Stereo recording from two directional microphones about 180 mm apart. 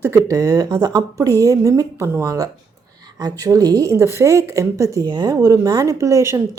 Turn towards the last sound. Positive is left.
turn(degrees=-15)  # may be behind; listen again after turning